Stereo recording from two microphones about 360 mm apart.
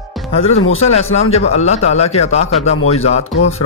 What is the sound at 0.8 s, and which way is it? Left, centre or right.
A man's voice, centre.